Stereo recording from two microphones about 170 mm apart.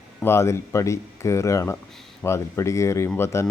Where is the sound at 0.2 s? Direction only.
15° left (ahead or behind).